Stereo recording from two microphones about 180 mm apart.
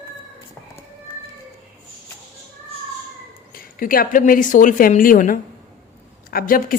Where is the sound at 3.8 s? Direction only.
50° left (ahead or behind).